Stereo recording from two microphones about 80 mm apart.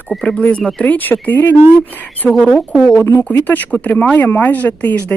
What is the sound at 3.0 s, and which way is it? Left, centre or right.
Speech, left.